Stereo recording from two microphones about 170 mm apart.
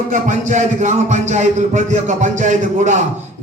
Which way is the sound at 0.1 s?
45° right (ahead or behind).